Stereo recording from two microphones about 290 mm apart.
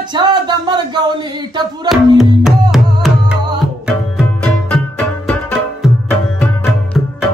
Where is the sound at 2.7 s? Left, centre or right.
Centre.